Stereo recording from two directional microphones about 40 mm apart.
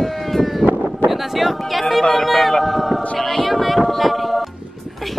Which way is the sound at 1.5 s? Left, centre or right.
Centre.